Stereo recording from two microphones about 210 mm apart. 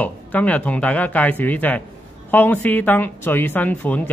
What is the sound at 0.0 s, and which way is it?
A woman's voice, 5° left (ahead or behind).